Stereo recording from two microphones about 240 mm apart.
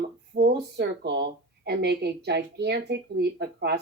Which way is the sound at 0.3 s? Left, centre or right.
Right.